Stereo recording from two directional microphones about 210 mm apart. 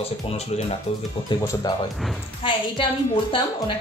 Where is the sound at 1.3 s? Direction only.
20° left (ahead or behind).